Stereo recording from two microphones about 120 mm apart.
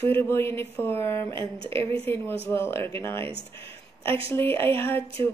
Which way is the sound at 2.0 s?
20° left (ahead or behind).